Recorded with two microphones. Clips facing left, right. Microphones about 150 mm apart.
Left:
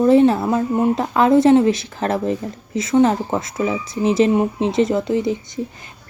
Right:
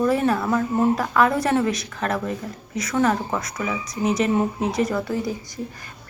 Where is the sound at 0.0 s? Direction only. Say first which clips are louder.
Left 7 dB; 25° left (ahead or behind).